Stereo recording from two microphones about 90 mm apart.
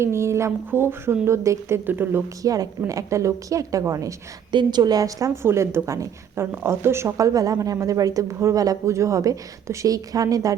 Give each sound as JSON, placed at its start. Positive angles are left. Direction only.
{"t": 0.0, "sound": "a woman's voice", "side_deg": -30}
{"t": 2.4, "sound": "a woman's voice", "side_deg": -40}
{"t": 4.5, "sound": "a woman's voice", "side_deg": -55}